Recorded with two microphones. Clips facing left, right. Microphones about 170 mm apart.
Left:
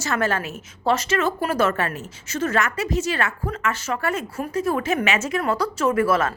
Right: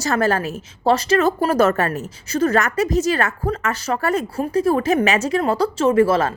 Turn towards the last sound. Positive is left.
turn(degrees=-30)  # may be behind; listen again after turning